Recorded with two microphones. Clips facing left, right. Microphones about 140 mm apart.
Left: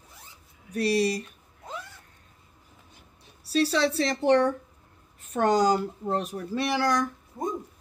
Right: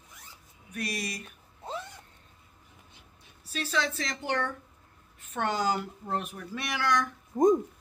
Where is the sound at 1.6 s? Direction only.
30° right (ahead or behind).